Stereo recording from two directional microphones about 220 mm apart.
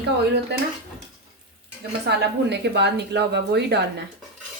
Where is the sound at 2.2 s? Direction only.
50° right (ahead or behind).